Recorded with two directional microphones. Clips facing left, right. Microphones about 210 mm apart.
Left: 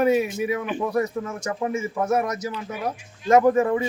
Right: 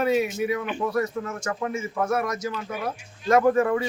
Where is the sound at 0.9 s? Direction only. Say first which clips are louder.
Left 2 dB; 15° left (ahead or behind).